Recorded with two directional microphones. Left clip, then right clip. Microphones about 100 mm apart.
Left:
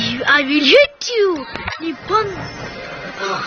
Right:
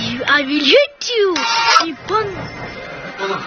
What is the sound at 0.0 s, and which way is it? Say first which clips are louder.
A woman's voice: left 1 dB; 20° left (ahead or behind).